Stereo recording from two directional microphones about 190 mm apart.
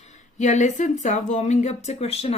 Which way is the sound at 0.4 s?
40° left (ahead or behind).